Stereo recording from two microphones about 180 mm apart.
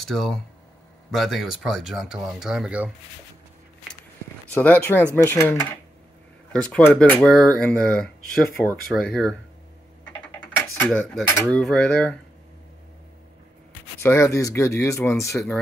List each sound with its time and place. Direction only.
0.0 s speech: centre (ahead or behind)
4.6 s speech: 10° left (ahead or behind)
10.4 s cutlery: 10° left (ahead or behind)
14.0 s speech: 15° left (ahead or behind)
15.3 s speech: 5° left (ahead or behind)